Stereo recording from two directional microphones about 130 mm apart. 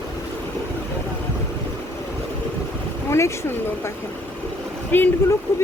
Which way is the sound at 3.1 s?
20° left (ahead or behind).